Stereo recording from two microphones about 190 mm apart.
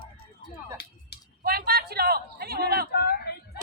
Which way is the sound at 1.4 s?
55° right (ahead or behind).